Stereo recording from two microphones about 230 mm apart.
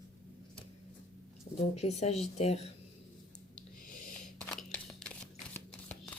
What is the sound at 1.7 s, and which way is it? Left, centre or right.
Speech, left.